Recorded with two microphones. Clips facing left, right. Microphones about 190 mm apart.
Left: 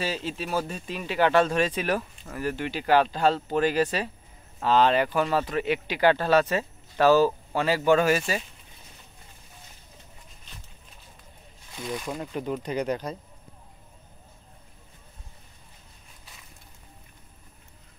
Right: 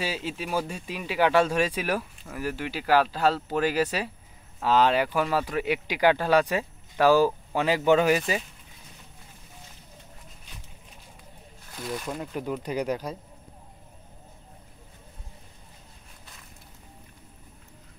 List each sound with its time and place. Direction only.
0.0 s speech: 10° right (ahead or behind)
11.7 s speech: centre (ahead or behind)